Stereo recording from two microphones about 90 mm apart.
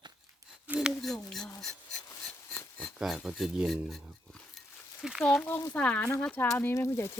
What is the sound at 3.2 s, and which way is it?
Speech, 5° right (ahead or behind).